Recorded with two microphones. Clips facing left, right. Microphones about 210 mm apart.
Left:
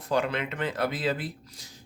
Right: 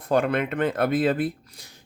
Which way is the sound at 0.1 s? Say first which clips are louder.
Right 5 dB; 55° right (ahead or behind).